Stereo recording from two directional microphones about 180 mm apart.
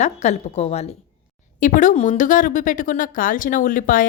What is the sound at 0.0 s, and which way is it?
A woman's voice, 40° left (ahead or behind).